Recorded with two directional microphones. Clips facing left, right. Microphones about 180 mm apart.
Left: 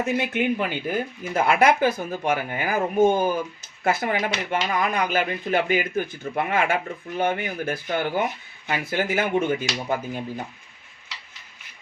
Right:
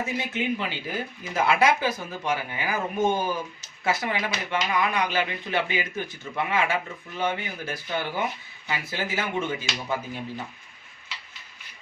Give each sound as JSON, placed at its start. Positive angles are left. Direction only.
{"t": 0.0, "sound": "speech", "side_deg": 60}